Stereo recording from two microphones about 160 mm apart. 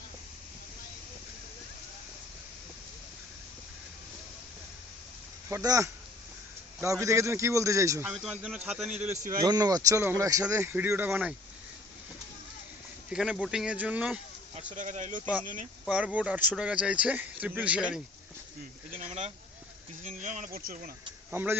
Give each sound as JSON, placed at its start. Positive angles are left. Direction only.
{"t": 5.5, "sound": "speech", "side_deg": -20}
{"t": 7.0, "sound": "speech", "side_deg": -20}
{"t": 8.1, "sound": "speech", "side_deg": -5}
{"t": 9.1, "sound": "speech", "side_deg": -50}
{"t": 9.4, "sound": "speech", "side_deg": -25}
{"t": 13.1, "sound": "speech", "side_deg": -5}
{"t": 14.7, "sound": "speech", "side_deg": -50}
{"t": 15.9, "sound": "speech", "side_deg": -5}
{"t": 20.0, "sound": "speech", "side_deg": -50}
{"t": 21.2, "sound": "speech", "side_deg": -15}